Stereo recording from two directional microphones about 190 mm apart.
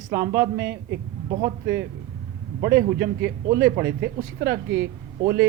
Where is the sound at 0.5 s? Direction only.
60° right (ahead or behind).